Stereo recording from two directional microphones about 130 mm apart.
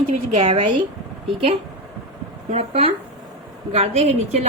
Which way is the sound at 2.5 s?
55° right (ahead or behind).